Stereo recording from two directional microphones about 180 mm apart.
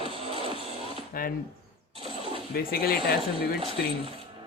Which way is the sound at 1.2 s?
55° left (ahead or behind).